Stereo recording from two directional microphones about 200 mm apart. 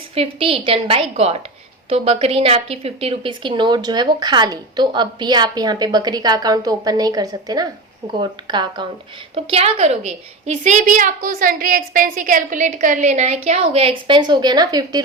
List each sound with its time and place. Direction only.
0.1 s a woman's voice: 30° right (ahead or behind)